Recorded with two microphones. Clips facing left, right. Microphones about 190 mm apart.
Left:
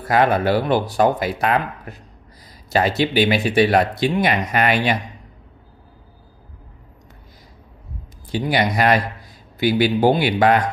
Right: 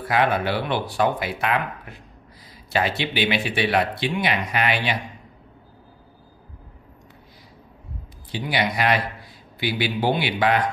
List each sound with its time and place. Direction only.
0.1 s speech: 40° left (ahead or behind)
8.3 s speech: 45° left (ahead or behind)